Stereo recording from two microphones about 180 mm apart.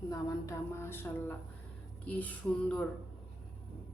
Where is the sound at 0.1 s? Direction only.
15° left (ahead or behind).